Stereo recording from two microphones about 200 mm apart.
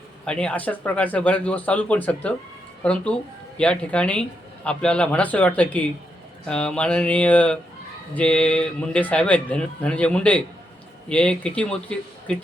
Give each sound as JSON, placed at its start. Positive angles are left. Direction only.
{"t": 0.3, "sound": "speech", "side_deg": 5}